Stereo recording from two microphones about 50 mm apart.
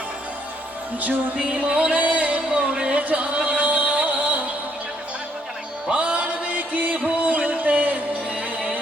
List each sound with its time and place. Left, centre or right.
1.4 s speech: right
3.0 s music: right
5.9 s music: right